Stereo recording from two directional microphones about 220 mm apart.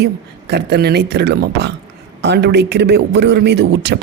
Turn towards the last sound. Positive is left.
turn(degrees=-50)  # may be behind; listen again after turning